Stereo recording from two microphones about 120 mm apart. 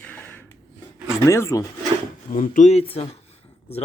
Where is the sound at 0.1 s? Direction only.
15° left (ahead or behind).